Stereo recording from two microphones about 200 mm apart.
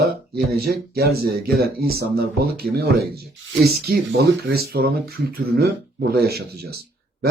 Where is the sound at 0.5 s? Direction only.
50° right (ahead or behind).